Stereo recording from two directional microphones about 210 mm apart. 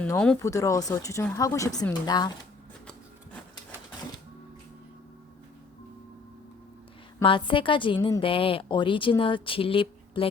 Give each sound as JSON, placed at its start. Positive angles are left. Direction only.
{"t": 0.0, "sound": "speech", "side_deg": 5}
{"t": 7.2, "sound": "a woman's voice", "side_deg": 25}